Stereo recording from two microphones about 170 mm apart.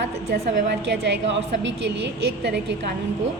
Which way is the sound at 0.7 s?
90° right.